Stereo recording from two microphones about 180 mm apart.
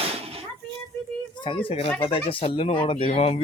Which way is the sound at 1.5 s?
25° left (ahead or behind).